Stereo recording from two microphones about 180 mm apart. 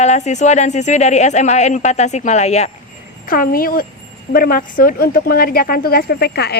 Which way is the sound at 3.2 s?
50° left (ahead or behind).